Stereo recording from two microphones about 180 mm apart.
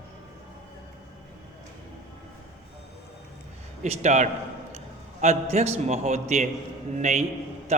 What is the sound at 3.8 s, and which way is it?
A man's voice, 40° right (ahead or behind).